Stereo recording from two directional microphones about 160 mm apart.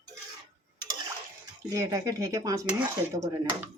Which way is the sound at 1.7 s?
20° right (ahead or behind).